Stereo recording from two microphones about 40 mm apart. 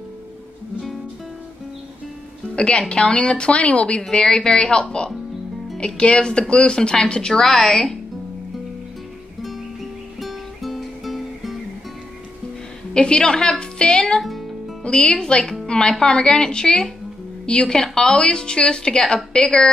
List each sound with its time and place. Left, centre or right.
2.5 s a woman's voice: left
4.1 s a woman's voice: centre
5.9 s a woman's voice: left
10.2 s music: centre
12.9 s a woman's voice: left
15.6 s music: left
16.0 s a woman's voice: centre